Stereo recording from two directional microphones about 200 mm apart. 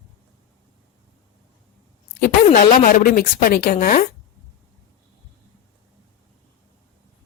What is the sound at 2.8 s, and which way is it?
A woman's voice, 45° left (ahead or behind).